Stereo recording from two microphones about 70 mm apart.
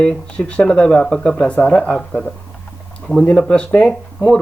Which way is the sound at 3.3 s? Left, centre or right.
Centre.